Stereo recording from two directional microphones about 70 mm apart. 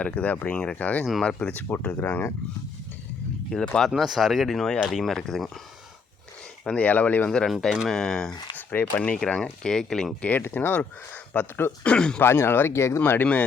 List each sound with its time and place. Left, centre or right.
0.0 s speech: centre
1.2 s speech: centre
1.5 s speech: left
3.8 s speech: centre
6.7 s speech: centre
7.3 s speech: centre
8.5 s speech: left; by 10.2 s centre
10.2 s speech: left
12.2 s speech: left
13.0 s speech: left